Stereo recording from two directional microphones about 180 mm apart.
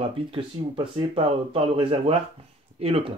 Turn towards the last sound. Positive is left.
turn(degrees=-35)  # may be behind; listen again after turning